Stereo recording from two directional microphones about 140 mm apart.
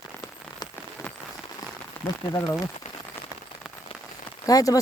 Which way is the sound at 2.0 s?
15° left (ahead or behind).